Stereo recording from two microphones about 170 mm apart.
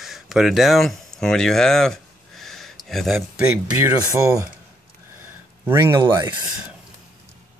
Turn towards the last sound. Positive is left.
turn(degrees=-20)  # may be behind; listen again after turning